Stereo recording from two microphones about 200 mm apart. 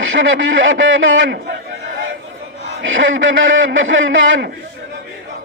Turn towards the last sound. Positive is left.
turn(degrees=-70)  # may be behind; listen again after turning